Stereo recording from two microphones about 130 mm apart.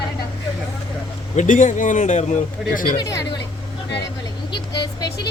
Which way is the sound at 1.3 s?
80° left.